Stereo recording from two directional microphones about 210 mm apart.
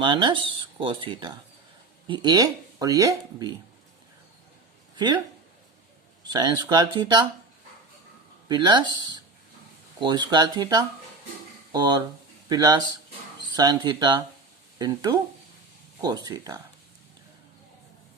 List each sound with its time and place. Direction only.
0.0 s speech: 20° right (ahead or behind)
4.9 s speech: 20° right (ahead or behind)
6.2 s speech: 20° right (ahead or behind)
8.4 s speech: 20° right (ahead or behind)